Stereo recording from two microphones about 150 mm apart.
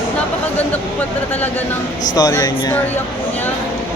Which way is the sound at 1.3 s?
10° left (ahead or behind).